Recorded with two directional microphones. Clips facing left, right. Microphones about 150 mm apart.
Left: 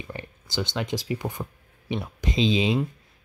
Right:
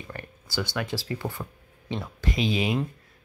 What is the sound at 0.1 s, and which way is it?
Speech, 20° left (ahead or behind).